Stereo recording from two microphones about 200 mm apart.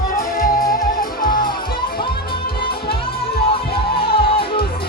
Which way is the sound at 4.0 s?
25° left (ahead or behind).